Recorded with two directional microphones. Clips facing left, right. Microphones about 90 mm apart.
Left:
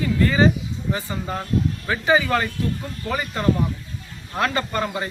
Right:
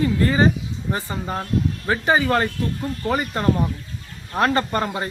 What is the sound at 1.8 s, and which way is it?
A man's voice, 35° right (ahead or behind).